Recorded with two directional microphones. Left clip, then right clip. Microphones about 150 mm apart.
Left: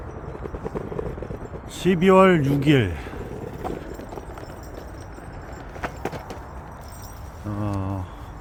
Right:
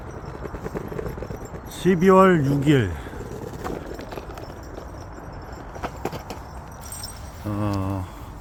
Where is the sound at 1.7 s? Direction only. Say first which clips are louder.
Even; centre (ahead or behind).